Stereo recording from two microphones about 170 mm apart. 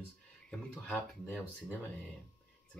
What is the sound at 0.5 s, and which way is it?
Speech, 10° left (ahead or behind).